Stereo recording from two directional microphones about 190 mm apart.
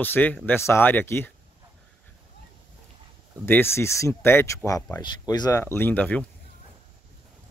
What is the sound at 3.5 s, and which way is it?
Speech, 10° left (ahead or behind).